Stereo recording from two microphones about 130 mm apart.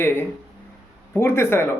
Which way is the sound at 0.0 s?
15° left (ahead or behind).